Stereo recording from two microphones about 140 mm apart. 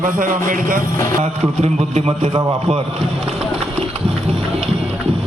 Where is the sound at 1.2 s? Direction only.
55° right (ahead or behind).